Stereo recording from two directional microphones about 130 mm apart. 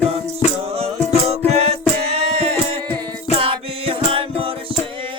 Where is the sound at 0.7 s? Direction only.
55° right (ahead or behind).